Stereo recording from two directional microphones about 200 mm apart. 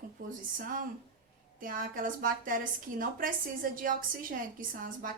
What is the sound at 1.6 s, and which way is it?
A woman's voice, 45° right (ahead or behind).